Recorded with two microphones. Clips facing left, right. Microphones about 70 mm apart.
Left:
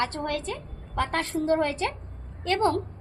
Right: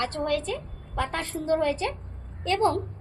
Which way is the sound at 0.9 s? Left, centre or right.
Left.